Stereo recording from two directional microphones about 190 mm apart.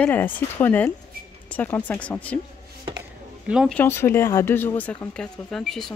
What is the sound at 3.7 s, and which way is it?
Speech, 10° left (ahead or behind).